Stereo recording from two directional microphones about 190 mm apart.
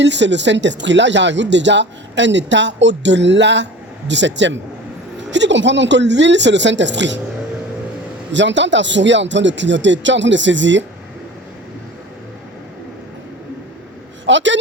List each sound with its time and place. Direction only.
0.0 s speech: 70° right (ahead or behind)
8.3 s speech: 70° right (ahead or behind)
14.3 s speech: 75° right (ahead or behind)